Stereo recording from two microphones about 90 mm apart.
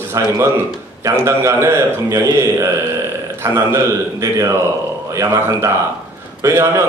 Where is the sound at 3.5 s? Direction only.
35° right (ahead or behind).